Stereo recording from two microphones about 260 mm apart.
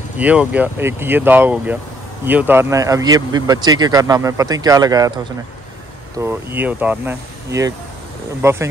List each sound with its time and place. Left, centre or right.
0.2 s speech: centre
6.1 s speech: centre